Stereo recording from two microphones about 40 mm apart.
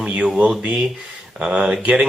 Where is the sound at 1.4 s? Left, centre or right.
Right.